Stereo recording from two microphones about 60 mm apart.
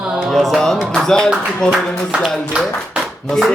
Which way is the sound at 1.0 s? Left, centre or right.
Centre.